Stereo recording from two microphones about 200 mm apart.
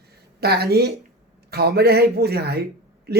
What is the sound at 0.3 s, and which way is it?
A woman's voice, 50° right (ahead or behind).